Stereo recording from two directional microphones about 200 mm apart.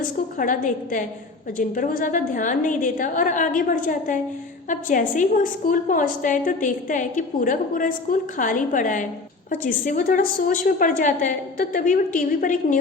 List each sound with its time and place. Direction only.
0.3 s a woman's voice: 45° left (ahead or behind)